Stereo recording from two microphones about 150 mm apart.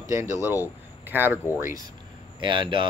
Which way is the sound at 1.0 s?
15° right (ahead or behind).